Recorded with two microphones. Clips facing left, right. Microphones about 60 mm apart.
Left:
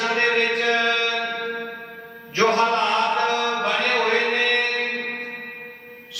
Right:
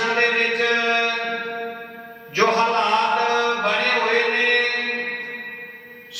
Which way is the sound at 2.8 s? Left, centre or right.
Centre.